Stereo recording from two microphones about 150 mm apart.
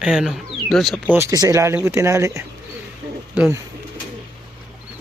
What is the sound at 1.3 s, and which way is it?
Speech, 25° right (ahead or behind).